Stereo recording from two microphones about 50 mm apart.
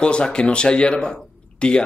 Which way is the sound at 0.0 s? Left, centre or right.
Centre.